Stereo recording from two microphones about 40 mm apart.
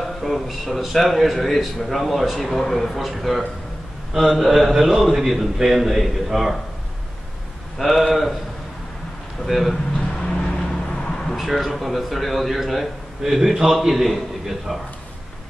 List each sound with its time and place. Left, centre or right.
0.0 s a man's voice: centre
7.8 s a man's voice: centre
9.5 s a man's voice: centre
10.2 s vehicle: left
11.0 s a sound: centre
11.3 s a man's voice: centre